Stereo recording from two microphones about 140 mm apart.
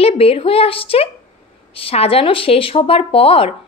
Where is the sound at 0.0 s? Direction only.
45° left (ahead or behind).